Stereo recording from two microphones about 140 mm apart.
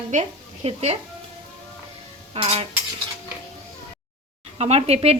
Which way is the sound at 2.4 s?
45° right (ahead or behind).